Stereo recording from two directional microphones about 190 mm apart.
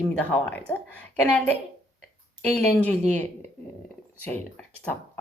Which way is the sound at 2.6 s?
10° left (ahead or behind).